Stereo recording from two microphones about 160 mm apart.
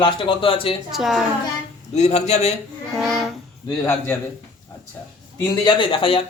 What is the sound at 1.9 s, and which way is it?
Speech, 45° left (ahead or behind).